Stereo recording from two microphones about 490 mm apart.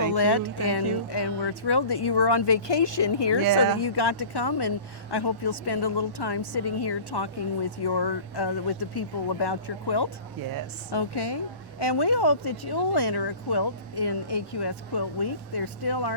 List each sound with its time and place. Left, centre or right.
0.1 s speech: left